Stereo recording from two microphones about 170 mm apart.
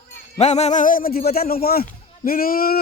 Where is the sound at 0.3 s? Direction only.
40° left (ahead or behind).